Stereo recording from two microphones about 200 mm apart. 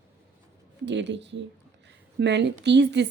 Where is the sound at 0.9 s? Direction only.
60° right (ahead or behind).